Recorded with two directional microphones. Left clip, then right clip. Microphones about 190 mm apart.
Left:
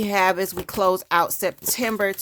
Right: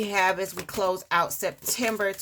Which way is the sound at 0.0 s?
45° left (ahead or behind).